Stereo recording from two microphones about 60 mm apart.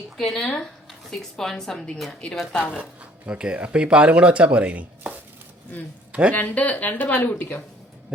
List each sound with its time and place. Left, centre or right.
0.3 s a woman's voice: centre
3.2 s speech: centre
6.1 s a sound: centre
6.3 s speech: left